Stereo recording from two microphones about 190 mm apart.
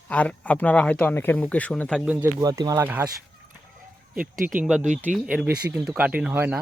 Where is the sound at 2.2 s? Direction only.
20° right (ahead or behind).